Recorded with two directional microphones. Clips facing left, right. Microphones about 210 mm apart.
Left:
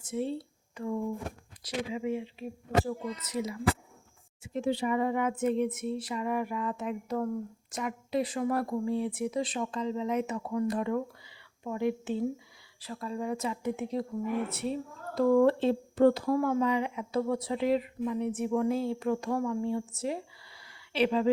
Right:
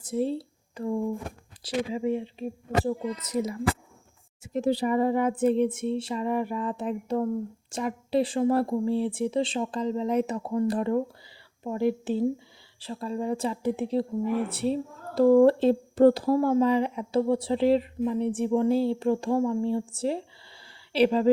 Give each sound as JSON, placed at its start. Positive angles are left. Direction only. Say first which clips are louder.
{"t": 0.0, "sound": "a woman's voice", "louder": "right 5 dB", "side_deg": -35}